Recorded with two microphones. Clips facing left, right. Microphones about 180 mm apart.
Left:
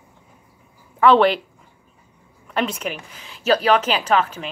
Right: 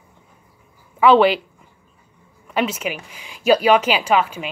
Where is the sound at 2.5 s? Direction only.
5° right (ahead or behind).